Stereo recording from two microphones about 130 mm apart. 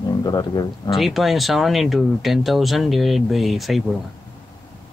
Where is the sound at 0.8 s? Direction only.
Centre (ahead or behind).